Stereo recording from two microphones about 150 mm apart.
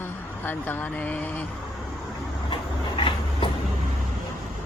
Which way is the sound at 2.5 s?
35° left (ahead or behind).